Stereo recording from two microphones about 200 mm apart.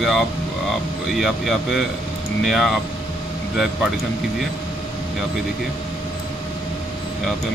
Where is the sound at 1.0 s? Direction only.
Centre (ahead or behind).